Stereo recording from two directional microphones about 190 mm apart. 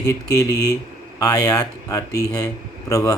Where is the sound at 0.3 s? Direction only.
20° left (ahead or behind).